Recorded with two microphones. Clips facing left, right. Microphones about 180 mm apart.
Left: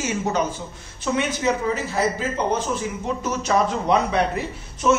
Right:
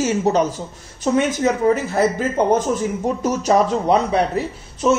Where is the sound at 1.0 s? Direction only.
45° right (ahead or behind).